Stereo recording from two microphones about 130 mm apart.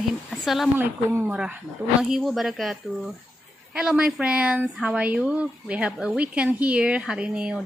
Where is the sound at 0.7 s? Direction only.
10° right (ahead or behind).